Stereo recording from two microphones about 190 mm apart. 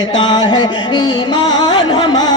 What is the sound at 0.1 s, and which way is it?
Music, 25° left (ahead or behind).